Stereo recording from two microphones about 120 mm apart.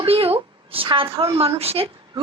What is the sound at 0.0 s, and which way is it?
A woman's voice, 50° right (ahead or behind).